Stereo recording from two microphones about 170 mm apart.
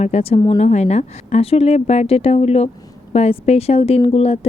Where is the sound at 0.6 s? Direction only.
40° left (ahead or behind).